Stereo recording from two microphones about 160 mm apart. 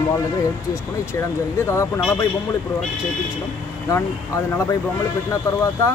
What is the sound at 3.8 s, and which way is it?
Speech, 20° left (ahead or behind).